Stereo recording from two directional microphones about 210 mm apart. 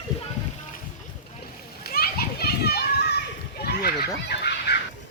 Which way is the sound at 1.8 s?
45° left (ahead or behind).